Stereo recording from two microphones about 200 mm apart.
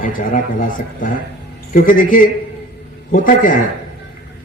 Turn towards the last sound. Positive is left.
turn(degrees=40)  # may be behind; listen again after turning